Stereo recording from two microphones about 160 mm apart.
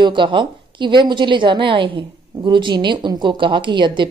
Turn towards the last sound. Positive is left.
turn(degrees=-30)  # may be behind; listen again after turning